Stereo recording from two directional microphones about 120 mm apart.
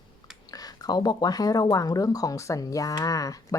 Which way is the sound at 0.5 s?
35° left (ahead or behind).